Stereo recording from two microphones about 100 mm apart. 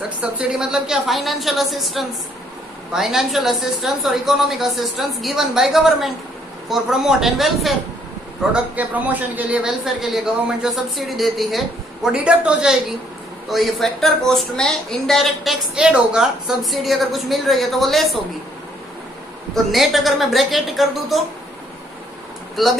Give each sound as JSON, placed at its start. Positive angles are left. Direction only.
{"t": 0.2, "sound": "a woman's voice", "side_deg": -10}
{"t": 8.7, "sound": "a woman's voice", "side_deg": -15}
{"t": 19.5, "sound": "a woman's voice", "side_deg": 0}
{"t": 22.6, "sound": "a woman's voice", "side_deg": 0}